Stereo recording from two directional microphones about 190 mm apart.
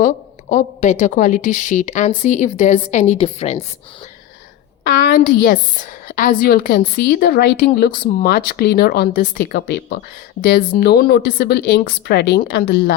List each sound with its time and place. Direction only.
0.0 s a woman's voice: 40° left (ahead or behind)
4.8 s a woman's voice: 45° left (ahead or behind)